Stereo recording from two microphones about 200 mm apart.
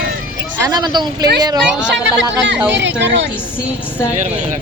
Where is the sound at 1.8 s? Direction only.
65° right (ahead or behind).